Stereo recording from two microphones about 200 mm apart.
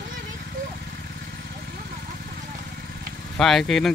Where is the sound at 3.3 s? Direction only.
Centre (ahead or behind).